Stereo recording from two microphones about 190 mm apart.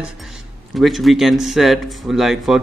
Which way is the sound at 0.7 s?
Centre (ahead or behind).